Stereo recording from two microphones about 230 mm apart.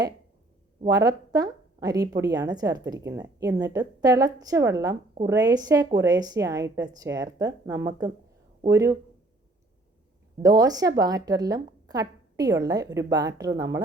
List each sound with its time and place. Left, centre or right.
0.8 s a woman's voice: centre
10.4 s a woman's voice: centre